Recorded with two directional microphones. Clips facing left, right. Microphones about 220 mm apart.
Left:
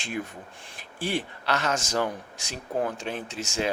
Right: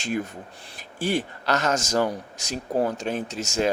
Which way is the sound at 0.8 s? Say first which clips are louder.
Right 4 dB; 45° right (ahead or behind).